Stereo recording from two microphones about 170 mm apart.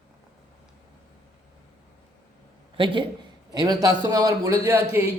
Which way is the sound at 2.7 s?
30° right (ahead or behind).